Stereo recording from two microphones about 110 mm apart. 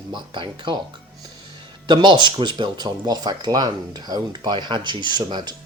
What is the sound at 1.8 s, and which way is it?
Speech, 45° right (ahead or behind).